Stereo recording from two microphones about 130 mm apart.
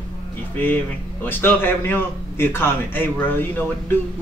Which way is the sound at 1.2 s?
15° left (ahead or behind).